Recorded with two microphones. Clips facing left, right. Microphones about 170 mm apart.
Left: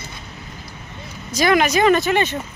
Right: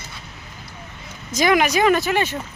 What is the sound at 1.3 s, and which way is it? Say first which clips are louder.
Speech: left 1 dB; 10° right (ahead or behind).